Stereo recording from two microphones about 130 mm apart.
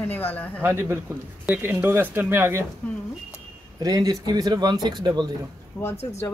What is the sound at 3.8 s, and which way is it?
A man's voice, 30° right (ahead or behind).